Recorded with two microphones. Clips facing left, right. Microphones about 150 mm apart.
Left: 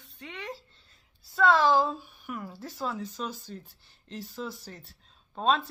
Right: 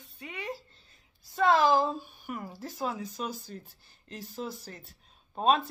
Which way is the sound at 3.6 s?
45° right (ahead or behind).